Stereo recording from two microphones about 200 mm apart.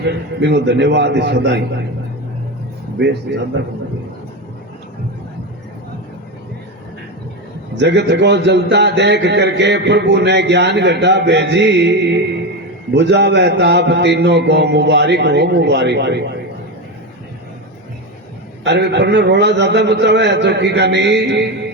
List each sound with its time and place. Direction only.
0.0 s a man's voice: 55° right (ahead or behind)
7.8 s a man's voice: 60° right (ahead or behind)
18.6 s a man's voice: 60° right (ahead or behind)